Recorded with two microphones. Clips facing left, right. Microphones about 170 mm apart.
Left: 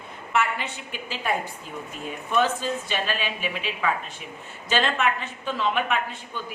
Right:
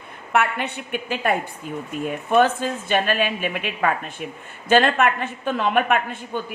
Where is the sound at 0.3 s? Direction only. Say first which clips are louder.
Right 4 dB; 60° right (ahead or behind).